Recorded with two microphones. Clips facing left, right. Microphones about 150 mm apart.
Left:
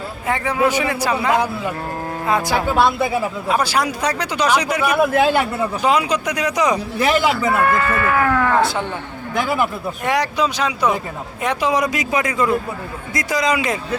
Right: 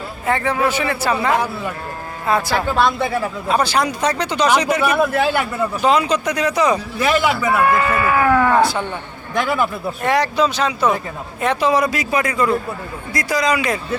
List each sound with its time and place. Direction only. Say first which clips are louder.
0.3 s speech: even; 10° left (ahead or behind)
7.6 s speech: right 1 dB; 10° right (ahead or behind)
10.0 s a man's voice: right 2 dB; 15° left (ahead or behind)